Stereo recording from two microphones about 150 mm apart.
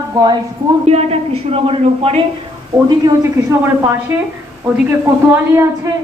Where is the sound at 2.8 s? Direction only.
30° right (ahead or behind).